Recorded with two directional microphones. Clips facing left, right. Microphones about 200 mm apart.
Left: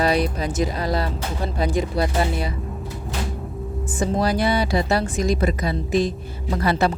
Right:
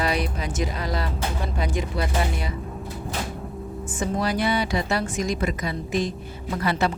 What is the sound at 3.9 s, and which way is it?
Speech, 35° left (ahead or behind).